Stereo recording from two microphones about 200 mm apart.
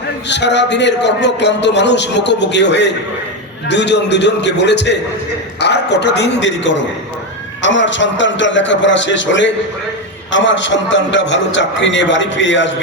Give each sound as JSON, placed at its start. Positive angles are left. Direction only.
{"t": 0.3, "sound": "a man's voice", "side_deg": 60}